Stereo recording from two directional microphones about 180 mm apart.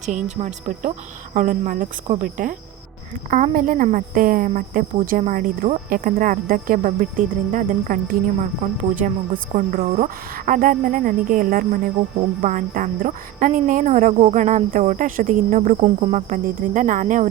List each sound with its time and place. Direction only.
0.3 s speech: 35° right (ahead or behind)
9.3 s speech: 35° right (ahead or behind)
9.9 s speech: 45° right (ahead or behind)